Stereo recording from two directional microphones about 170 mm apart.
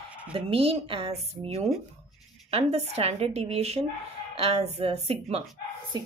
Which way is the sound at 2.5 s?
35° right (ahead or behind).